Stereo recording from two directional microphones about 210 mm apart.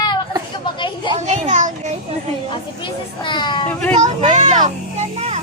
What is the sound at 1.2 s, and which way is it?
Children playing, 35° right (ahead or behind).